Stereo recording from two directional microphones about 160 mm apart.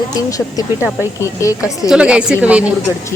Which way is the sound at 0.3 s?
20° left (ahead or behind).